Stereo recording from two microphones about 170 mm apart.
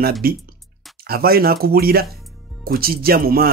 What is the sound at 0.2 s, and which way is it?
Speech, 60° right (ahead or behind).